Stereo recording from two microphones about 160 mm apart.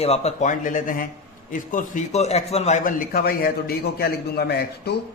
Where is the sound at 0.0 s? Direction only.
40° left (ahead or behind).